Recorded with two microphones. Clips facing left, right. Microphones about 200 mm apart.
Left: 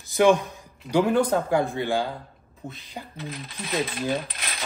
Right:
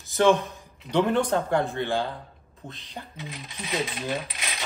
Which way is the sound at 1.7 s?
15° left (ahead or behind).